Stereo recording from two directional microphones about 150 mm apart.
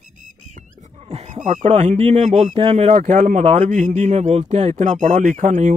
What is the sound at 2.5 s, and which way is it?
Speech, 40° right (ahead or behind).